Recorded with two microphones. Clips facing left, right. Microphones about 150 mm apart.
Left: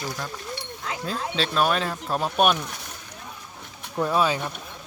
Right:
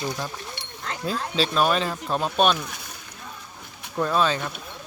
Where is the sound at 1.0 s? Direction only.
5° right (ahead or behind).